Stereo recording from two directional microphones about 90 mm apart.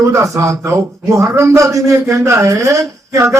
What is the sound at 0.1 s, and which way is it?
Speech, 35° right (ahead or behind).